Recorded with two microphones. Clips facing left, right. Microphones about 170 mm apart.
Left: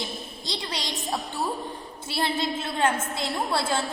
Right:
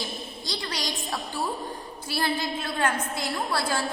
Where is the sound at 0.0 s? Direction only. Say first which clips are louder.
Even; 25° left (ahead or behind).